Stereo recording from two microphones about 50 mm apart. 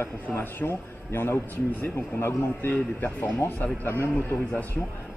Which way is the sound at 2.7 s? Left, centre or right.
Left.